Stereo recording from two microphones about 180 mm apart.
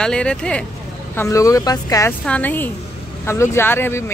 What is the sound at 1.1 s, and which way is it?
A woman's voice, 15° left (ahead or behind).